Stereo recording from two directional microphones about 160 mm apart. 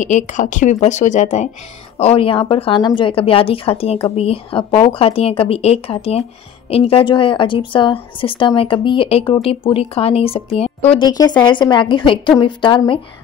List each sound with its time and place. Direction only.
0.0 s a woman's voice: 50° left (ahead or behind)
10.9 s a woman's voice: 25° left (ahead or behind)